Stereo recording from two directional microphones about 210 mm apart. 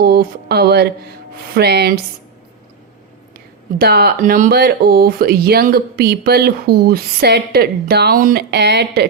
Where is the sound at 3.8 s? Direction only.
50° right (ahead or behind).